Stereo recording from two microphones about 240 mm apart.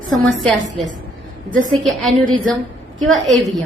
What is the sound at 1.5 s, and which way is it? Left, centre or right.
Speech, right.